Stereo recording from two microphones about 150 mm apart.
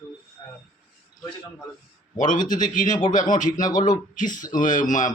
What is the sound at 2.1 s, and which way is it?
A man's voice, 60° left (ahead or behind).